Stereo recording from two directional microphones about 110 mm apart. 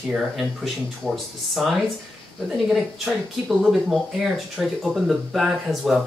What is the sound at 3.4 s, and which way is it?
Speech, 5° right (ahead or behind).